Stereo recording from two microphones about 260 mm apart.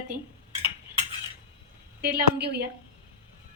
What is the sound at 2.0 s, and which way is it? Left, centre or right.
Speech, right.